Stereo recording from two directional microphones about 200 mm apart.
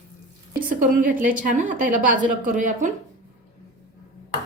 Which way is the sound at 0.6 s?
45° right (ahead or behind).